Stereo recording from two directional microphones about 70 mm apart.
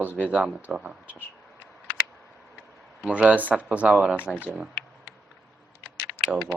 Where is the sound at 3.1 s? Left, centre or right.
Centre.